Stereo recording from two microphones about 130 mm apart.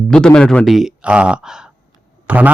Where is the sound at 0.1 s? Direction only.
5° left (ahead or behind).